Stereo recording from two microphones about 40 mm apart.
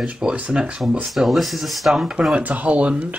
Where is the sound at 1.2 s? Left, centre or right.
Centre.